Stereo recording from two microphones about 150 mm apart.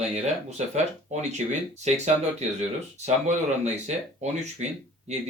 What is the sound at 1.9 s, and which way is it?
Speech, 50° right (ahead or behind).